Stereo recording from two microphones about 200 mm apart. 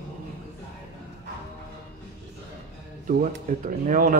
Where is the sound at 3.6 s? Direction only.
40° right (ahead or behind).